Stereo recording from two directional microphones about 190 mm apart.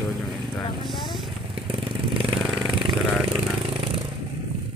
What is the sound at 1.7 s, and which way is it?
Vehicle, 30° right (ahead or behind).